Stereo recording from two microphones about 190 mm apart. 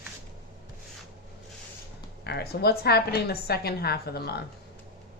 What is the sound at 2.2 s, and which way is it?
A woman's voice, 55° left (ahead or behind).